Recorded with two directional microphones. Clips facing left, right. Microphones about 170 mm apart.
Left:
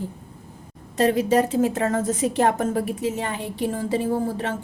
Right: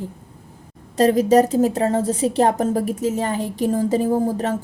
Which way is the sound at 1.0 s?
40° right (ahead or behind).